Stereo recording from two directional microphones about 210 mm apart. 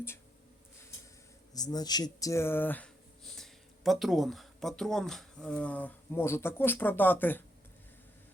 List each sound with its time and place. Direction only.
1.5 s speech: 20° left (ahead or behind)